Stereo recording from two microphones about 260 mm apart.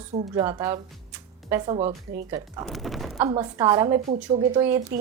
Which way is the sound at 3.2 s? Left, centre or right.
Centre.